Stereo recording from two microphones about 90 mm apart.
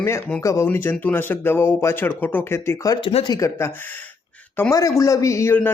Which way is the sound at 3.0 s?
90° left.